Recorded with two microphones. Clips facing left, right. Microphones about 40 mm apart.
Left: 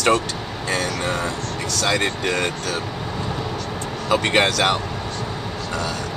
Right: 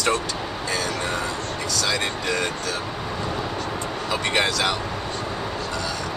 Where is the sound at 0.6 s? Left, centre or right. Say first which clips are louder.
Left 4 dB; left.